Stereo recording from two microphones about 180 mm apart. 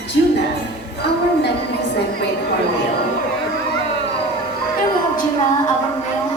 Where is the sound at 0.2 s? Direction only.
70° left (ahead or behind).